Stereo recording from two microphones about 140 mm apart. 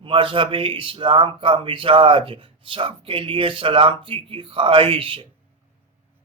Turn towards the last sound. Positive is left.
turn(degrees=-40)  # may be behind; listen again after turning